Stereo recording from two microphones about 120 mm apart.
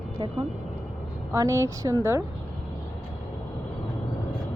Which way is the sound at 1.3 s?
25° right (ahead or behind).